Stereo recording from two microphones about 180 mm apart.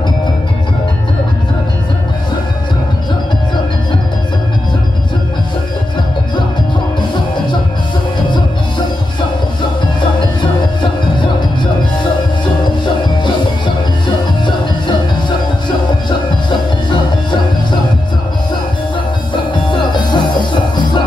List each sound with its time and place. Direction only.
19.5 s music: 25° left (ahead or behind)